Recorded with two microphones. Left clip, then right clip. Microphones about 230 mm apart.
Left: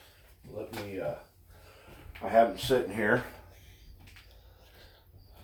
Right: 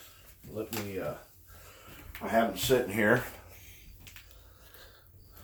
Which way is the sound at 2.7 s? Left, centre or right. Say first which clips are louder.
Right 1 dB; right.